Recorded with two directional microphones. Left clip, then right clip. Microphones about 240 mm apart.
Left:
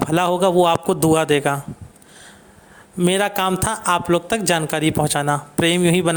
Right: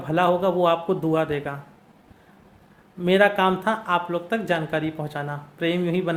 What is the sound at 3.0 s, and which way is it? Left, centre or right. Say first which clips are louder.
A man's voice: even; left.